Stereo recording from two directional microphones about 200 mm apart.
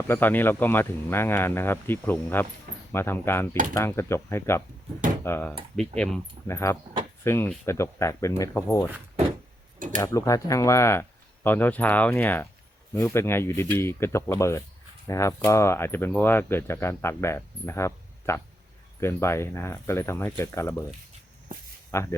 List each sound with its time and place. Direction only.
0.1 s speech: 10° left (ahead or behind)
6.5 s speech: 15° left (ahead or behind)
9.7 s a sound: 40° right (ahead or behind)
10.0 s speech: 15° left (ahead or behind)
21.9 s speech: 15° left (ahead or behind)